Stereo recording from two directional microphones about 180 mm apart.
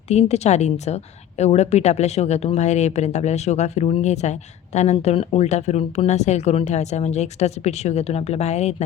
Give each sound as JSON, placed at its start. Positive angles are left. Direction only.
{"t": 0.1, "sound": "a woman's voice", "side_deg": 35}